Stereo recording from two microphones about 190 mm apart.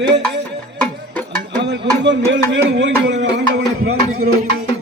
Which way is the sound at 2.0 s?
65° right (ahead or behind).